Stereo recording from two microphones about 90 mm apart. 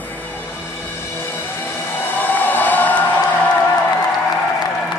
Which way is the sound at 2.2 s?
20° left (ahead or behind).